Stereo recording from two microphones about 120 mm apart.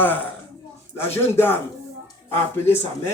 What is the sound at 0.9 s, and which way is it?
Speech, 20° left (ahead or behind).